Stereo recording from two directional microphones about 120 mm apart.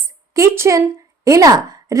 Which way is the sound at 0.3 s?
25° right (ahead or behind).